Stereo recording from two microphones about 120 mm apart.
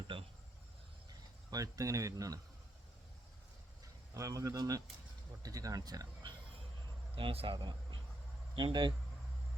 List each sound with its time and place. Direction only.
0.1 s a sound: 45° right (ahead or behind)
1.5 s speech: 30° right (ahead or behind)
4.1 s speech: 30° right (ahead or behind)
7.2 s speech: 50° right (ahead or behind)